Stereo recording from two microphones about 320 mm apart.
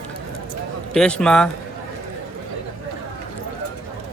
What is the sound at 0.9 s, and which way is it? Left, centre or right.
Speech, centre.